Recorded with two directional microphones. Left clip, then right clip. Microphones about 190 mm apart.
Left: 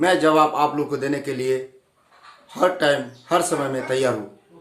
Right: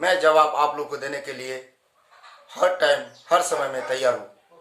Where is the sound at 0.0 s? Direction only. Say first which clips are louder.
Left 1 dB; centre (ahead or behind).